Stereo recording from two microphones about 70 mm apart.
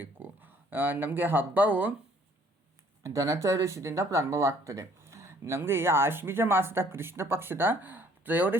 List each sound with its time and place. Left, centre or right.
0.0 s speech: right
3.0 s speech: right